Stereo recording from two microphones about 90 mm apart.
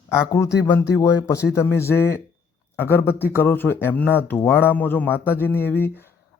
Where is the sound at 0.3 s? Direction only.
40° left (ahead or behind).